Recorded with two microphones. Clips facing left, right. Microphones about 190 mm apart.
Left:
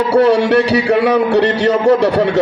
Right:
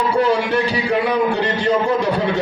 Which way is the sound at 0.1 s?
75° left (ahead or behind).